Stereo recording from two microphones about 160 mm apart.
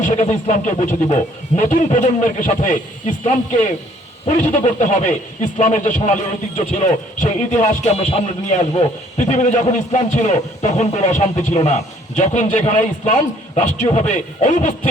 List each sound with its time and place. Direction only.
0.0 s speech: 45° left (ahead or behind)